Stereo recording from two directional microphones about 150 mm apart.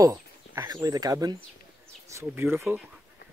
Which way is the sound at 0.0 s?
25° right (ahead or behind).